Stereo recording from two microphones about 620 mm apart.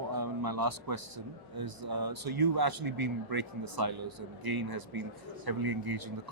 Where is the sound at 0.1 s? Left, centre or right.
Right.